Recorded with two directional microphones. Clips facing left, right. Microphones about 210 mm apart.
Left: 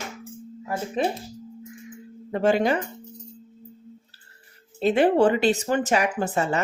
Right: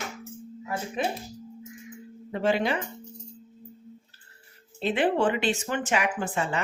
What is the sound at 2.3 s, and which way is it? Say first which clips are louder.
Speech: left 4 dB; 45° left (ahead or behind).